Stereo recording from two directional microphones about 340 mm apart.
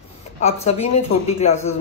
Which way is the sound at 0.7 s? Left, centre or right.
Centre.